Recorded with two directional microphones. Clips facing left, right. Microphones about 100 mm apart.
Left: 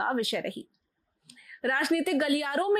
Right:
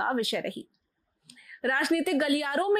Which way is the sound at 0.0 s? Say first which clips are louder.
Even; 20° right (ahead or behind).